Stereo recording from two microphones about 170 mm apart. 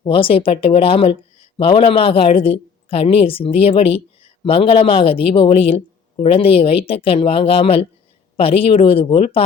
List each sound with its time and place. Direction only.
0.0 s a woman's voice: 30° left (ahead or behind)